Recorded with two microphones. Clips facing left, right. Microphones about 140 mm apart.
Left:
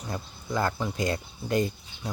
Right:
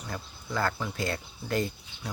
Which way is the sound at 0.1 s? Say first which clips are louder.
Left 4 dB; 20° left (ahead or behind).